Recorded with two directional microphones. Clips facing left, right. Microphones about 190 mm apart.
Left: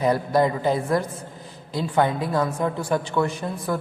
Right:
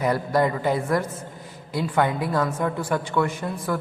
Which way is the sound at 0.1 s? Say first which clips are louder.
Left 1 dB; 20° left (ahead or behind).